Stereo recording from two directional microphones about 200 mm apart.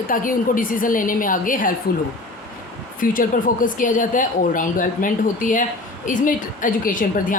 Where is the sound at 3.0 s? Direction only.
45° left (ahead or behind).